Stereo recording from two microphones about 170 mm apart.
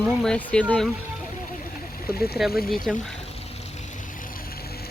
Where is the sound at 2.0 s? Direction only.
65° left (ahead or behind).